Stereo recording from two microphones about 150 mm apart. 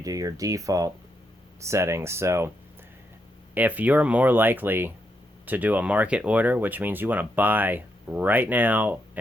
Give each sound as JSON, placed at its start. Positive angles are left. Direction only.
{"t": 0.0, "sound": "speech", "side_deg": -25}
{"t": 3.5, "sound": "speech", "side_deg": -10}